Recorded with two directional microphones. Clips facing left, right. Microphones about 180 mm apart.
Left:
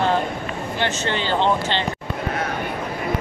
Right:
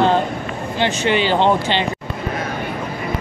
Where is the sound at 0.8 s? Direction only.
15° right (ahead or behind).